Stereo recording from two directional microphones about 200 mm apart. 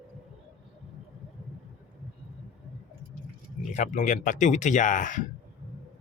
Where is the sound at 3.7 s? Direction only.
40° left (ahead or behind).